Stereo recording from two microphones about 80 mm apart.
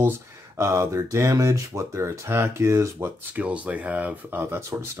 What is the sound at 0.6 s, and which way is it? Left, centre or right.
Speech, right.